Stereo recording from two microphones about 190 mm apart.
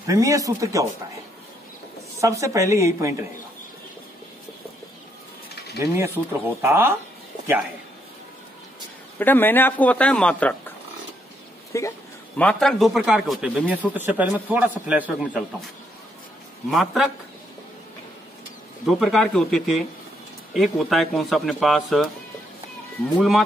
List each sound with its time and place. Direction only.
0.0 s a woman's voice: 15° right (ahead or behind)
2.1 s a woman's voice: 15° right (ahead or behind)
5.6 s mechanisms: 55° left (ahead or behind)
6.6 s a woman's voice: 15° right (ahead or behind)
9.2 s speech: 10° left (ahead or behind)
11.7 s speech: 15° left (ahead or behind)
12.4 s speech: 5° left (ahead or behind)
16.7 s speech: centre (ahead or behind)
18.9 s speech: centre (ahead or behind)
23.1 s speech: centre (ahead or behind)